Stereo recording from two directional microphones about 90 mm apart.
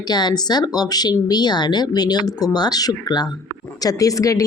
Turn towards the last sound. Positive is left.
turn(degrees=40)  # may be behind; listen again after turning